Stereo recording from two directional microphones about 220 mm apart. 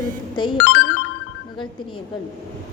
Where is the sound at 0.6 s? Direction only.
55° left (ahead or behind).